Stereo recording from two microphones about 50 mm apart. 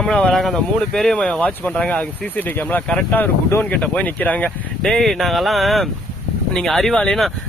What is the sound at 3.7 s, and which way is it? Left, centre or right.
Speech, left.